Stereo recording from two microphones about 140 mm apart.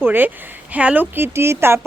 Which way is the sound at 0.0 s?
15° right (ahead or behind).